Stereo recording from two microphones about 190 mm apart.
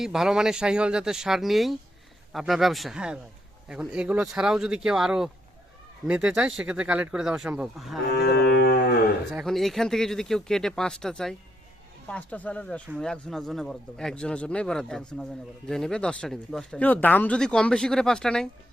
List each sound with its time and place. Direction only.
0.0 s speech: centre (ahead or behind)
8.1 s cattle: 60° left (ahead or behind)
9.3 s speech: centre (ahead or behind)